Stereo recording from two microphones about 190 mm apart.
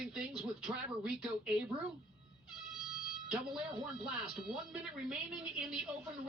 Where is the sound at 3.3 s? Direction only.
Centre (ahead or behind).